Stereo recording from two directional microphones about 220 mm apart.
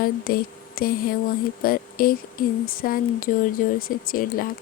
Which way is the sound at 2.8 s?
40° left (ahead or behind).